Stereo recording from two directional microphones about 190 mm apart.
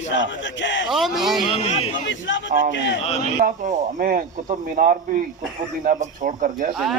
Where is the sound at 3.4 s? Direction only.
45° right (ahead or behind).